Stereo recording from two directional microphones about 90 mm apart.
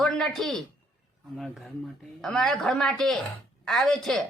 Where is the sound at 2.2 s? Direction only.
5° left (ahead or behind).